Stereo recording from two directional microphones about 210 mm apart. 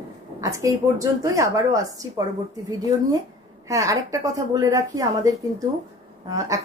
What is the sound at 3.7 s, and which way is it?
Speech, 15° right (ahead or behind).